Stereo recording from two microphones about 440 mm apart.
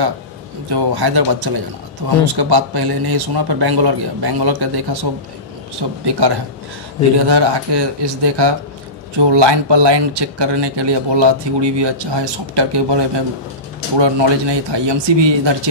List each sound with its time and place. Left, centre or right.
0.7 s speech: right